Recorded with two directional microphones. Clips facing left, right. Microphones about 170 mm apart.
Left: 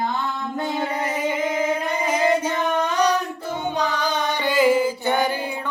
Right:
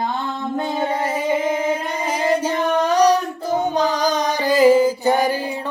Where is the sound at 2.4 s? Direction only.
35° right (ahead or behind).